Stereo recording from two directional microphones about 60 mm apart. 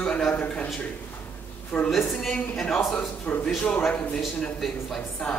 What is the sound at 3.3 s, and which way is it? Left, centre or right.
Speech, left.